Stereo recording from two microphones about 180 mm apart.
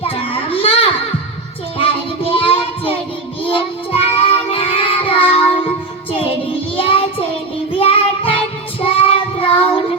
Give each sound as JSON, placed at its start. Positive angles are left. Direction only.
{"t": 0.0, "sound": "baby cry", "side_deg": 30}
{"t": 2.3, "sound": "child singing", "side_deg": 30}
{"t": 6.7, "sound": "child singing", "side_deg": 30}